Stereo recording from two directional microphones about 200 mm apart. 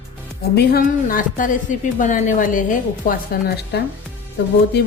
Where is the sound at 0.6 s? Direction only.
50° left (ahead or behind).